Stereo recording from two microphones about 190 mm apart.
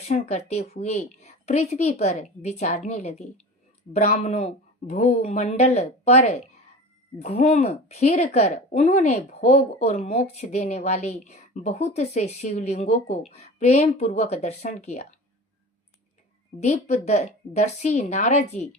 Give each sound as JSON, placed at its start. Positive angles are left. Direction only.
{"t": 0.1, "sound": "a woman's voice", "side_deg": 35}
{"t": 16.6, "sound": "a woman's voice", "side_deg": 35}